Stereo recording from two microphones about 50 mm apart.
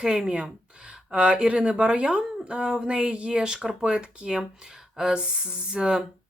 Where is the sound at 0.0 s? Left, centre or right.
Centre.